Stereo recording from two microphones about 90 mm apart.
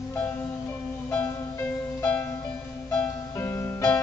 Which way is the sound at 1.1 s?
20° left (ahead or behind).